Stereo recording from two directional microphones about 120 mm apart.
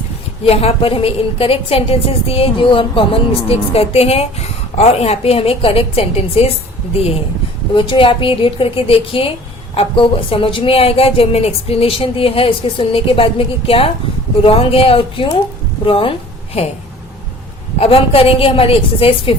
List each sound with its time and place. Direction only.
0.4 s a woman's voice: 55° left (ahead or behind)
7.7 s a woman's voice: 45° left (ahead or behind)
17.7 s a woman's voice: 50° left (ahead or behind)